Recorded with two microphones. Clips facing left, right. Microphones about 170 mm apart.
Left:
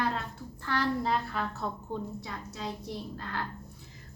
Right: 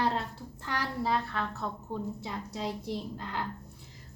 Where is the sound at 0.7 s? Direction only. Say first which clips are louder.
Left 3 dB; 10° right (ahead or behind).